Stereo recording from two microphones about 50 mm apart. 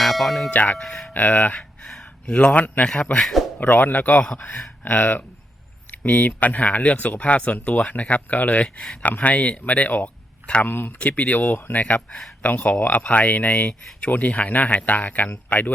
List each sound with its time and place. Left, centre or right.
0.0 s speech: centre
0.5 s speech: left
0.8 s speech: centre
1.1 s speech: left
1.9 s speech: centre; by 5.2 s left
6.0 s speech: left
8.7 s speech: centre
9.0 s speech: left
10.7 s speech: left
10.9 s speech: left
14.8 s speech: left